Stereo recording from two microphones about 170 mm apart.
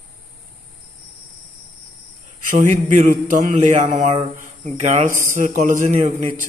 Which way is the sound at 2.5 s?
45° right (ahead or behind).